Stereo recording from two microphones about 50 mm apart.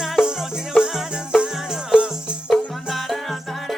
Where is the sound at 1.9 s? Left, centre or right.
Centre.